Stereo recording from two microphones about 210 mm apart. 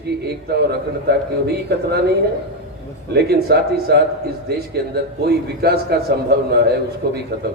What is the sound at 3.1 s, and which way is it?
A man's voice, 50° right (ahead or behind).